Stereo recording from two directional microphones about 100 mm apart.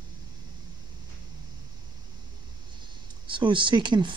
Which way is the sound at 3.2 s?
55° right (ahead or behind).